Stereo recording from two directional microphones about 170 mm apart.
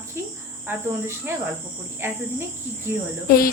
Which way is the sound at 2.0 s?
15° right (ahead or behind).